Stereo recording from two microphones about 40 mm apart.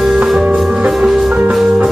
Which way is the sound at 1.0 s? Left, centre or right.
Right.